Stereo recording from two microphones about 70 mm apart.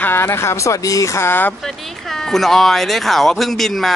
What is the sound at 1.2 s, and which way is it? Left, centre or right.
Speech, left.